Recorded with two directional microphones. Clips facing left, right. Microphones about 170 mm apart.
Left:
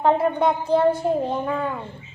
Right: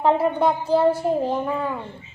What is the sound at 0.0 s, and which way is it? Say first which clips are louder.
A child's voice: even; centre (ahead or behind).